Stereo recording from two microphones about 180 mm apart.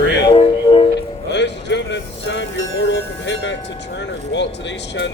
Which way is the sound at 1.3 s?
75° left (ahead or behind).